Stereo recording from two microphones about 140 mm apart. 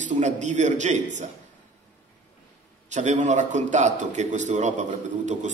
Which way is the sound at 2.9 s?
55° right (ahead or behind).